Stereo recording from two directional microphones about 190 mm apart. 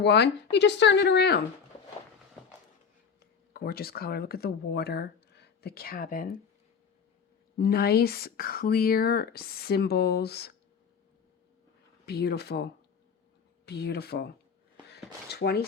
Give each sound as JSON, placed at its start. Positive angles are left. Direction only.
{"t": 0.0, "sound": "speech", "side_deg": 65}
{"t": 3.2, "sound": "speech", "side_deg": 55}
{"t": 7.6, "sound": "speech", "side_deg": 55}
{"t": 12.0, "sound": "speech", "side_deg": 60}